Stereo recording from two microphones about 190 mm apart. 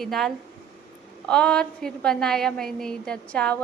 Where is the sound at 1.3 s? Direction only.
5° left (ahead or behind).